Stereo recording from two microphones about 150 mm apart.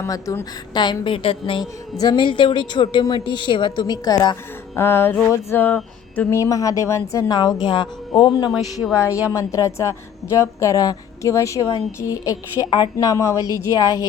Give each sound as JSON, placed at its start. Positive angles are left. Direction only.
{"t": 0.0, "sound": "a woman's voice", "side_deg": 20}
{"t": 4.7, "sound": "music", "side_deg": 15}
{"t": 5.3, "sound": "a sound", "side_deg": 15}
{"t": 6.4, "sound": "a woman's voice", "side_deg": 20}